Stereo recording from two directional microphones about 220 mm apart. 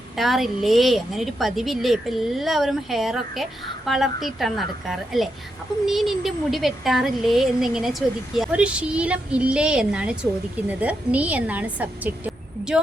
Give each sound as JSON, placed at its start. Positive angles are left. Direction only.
{"t": 0.2, "sound": "a woman's voice", "side_deg": 0}